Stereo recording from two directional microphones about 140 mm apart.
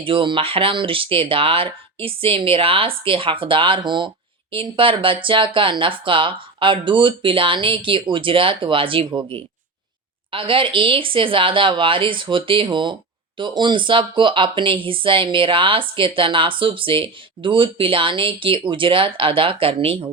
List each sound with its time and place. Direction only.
0.0 s speech: 40° right (ahead or behind)